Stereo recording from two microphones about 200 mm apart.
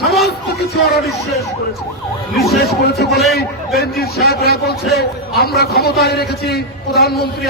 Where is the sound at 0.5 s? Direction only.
50° left (ahead or behind).